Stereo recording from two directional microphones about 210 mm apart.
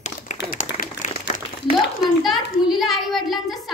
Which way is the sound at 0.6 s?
35° left (ahead or behind).